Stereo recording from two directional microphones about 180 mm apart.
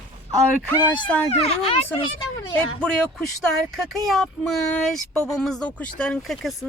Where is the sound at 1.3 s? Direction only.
35° left (ahead or behind).